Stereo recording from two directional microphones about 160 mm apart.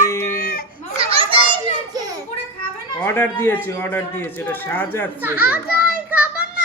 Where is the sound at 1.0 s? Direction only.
35° right (ahead or behind).